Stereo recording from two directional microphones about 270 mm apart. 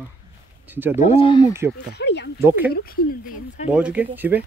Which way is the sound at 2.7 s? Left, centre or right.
Left.